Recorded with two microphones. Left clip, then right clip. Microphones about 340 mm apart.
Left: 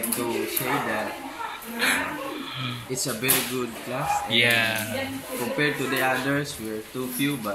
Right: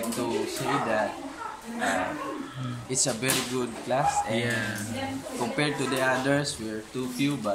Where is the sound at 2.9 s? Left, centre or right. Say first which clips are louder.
Right 2 dB; centre.